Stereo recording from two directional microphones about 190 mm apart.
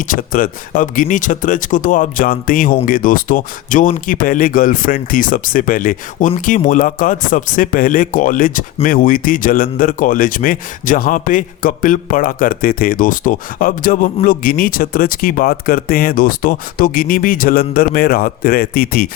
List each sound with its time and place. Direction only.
0.0 s speech: 45° left (ahead or behind)